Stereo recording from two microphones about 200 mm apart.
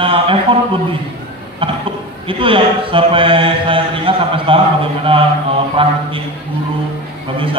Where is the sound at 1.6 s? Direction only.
25° right (ahead or behind).